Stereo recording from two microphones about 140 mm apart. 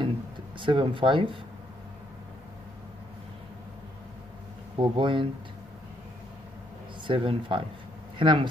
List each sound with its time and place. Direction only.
0.6 s speech: 35° right (ahead or behind)
4.7 s speech: 35° right (ahead or behind)
7.1 s speech: 35° right (ahead or behind)